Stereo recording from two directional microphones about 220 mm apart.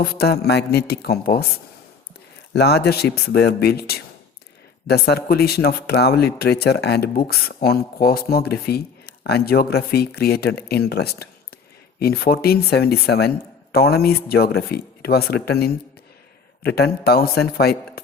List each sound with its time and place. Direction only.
0.0 s speech: 45° left (ahead or behind)
2.5 s speech: 45° left (ahead or behind)